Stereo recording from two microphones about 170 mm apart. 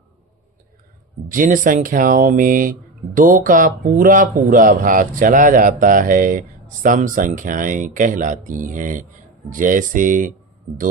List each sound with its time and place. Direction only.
1.3 s speech: 50° right (ahead or behind)